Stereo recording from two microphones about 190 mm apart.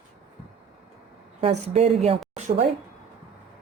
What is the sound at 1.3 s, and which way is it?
A woman's voice, 35° right (ahead or behind).